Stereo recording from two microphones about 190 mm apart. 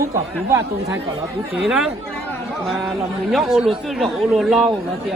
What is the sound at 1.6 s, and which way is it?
Speech, 5° right (ahead or behind).